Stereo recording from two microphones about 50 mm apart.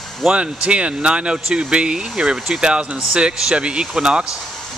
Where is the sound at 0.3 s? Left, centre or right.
Right.